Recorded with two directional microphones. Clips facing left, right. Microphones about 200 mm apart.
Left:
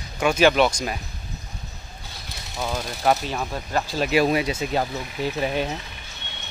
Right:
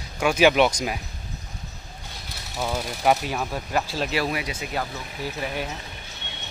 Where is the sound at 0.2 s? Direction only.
10° right (ahead or behind).